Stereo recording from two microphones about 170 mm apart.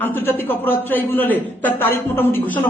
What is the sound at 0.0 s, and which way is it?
A man's voice, 10° left (ahead or behind).